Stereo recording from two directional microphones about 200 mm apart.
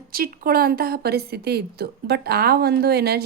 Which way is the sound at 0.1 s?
50° right (ahead or behind).